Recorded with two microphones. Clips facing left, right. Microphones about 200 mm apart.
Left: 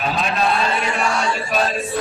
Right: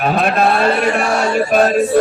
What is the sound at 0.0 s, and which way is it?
Speech, 55° right (ahead or behind).